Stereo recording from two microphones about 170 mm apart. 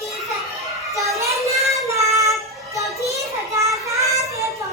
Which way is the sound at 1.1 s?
15° right (ahead or behind).